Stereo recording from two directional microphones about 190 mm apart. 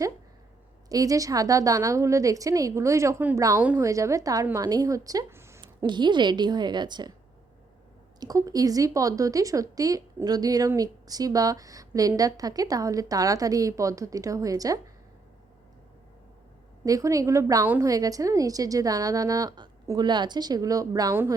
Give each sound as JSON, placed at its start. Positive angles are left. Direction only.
{"t": 0.9, "sound": "speech", "side_deg": -20}
{"t": 8.2, "sound": "speech", "side_deg": -20}
{"t": 16.8, "sound": "a woman's voice", "side_deg": -20}